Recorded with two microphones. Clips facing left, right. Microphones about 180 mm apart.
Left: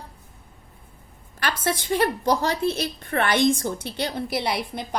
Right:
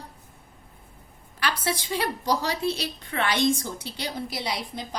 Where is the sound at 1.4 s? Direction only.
50° left (ahead or behind).